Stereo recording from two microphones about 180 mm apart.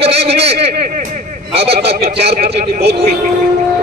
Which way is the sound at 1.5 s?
35° right (ahead or behind).